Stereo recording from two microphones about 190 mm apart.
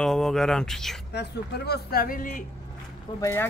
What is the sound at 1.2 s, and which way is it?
Speech, 60° left (ahead or behind).